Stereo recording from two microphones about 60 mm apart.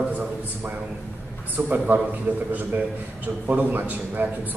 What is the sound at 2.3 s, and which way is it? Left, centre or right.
Speech, right.